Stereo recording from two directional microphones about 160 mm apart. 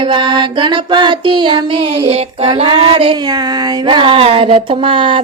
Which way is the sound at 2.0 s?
35° right (ahead or behind).